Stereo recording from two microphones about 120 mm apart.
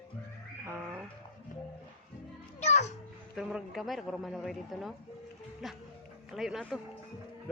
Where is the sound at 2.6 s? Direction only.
70° left (ahead or behind).